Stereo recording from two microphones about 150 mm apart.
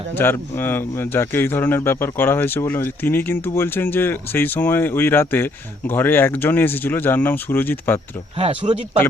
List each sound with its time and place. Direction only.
0.2 s speech: 15° left (ahead or behind)
8.4 s speech: 40° right (ahead or behind)